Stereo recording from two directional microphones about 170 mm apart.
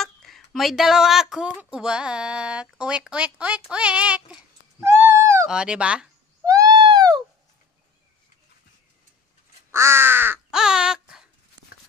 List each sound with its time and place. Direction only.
0.0 s speech: centre (ahead or behind)
6.4 s owl: 20° right (ahead or behind)
9.7 s crow: 15° right (ahead or behind)